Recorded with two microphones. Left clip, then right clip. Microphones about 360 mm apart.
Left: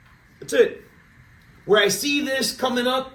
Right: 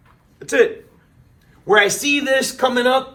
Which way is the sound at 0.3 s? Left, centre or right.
Right.